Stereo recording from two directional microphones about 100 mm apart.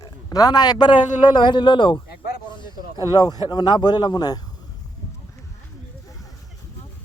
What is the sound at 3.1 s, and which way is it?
A man's voice, 45° left (ahead or behind).